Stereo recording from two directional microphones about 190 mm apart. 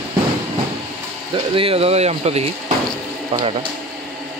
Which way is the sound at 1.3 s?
30° right (ahead or behind).